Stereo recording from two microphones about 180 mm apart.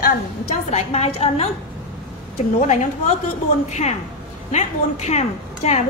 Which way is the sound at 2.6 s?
40° left (ahead or behind).